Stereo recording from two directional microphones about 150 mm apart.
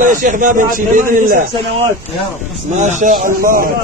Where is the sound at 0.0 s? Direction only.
60° right (ahead or behind).